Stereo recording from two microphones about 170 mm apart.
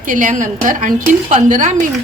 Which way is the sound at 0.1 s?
50° right (ahead or behind).